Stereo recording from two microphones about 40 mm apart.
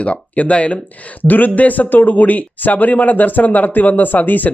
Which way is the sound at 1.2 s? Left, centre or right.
Left.